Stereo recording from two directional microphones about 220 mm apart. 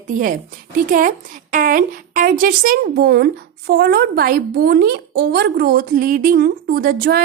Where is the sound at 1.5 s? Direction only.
40° right (ahead or behind).